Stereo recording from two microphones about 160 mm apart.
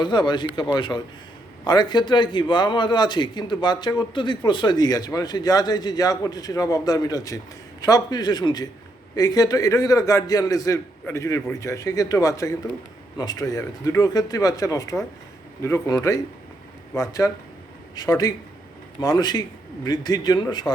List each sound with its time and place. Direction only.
0.0 s a man's voice: 30° left (ahead or behind)